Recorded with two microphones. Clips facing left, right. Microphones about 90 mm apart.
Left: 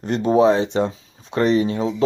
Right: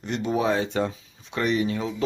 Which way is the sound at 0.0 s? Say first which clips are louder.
Left 9 dB; 40° left (ahead or behind).